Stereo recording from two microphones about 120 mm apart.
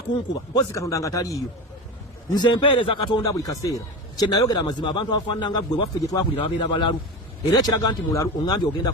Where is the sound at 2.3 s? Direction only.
40° left (ahead or behind).